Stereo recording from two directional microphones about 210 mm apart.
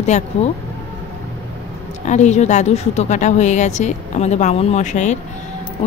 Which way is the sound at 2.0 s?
35° left (ahead or behind).